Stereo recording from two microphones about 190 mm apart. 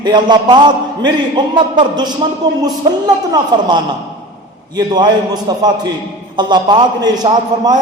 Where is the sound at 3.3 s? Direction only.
25° right (ahead or behind).